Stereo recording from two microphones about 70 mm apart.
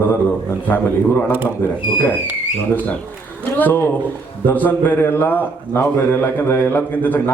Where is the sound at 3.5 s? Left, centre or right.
Left.